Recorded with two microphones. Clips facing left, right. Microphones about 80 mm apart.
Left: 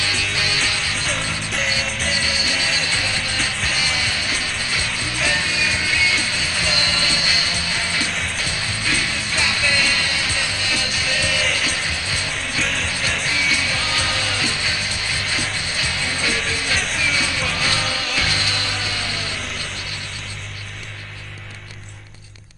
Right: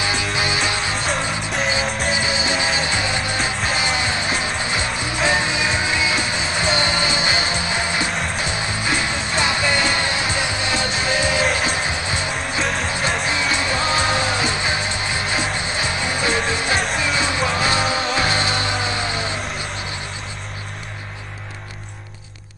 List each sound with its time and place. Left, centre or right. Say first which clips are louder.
0.0 s music: right 3 dB; right
1.1 s music: right 3 dB; centre
1.9 s music: right 3 dB; right
2.1 s music: right 3 dB; right
12.6 s music: right 4 dB; right